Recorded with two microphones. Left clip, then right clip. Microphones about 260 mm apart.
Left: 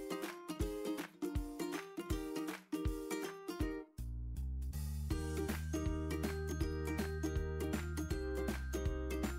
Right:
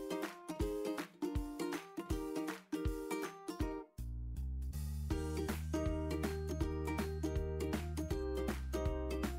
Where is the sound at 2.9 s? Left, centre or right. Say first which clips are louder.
Right 1 dB; centre.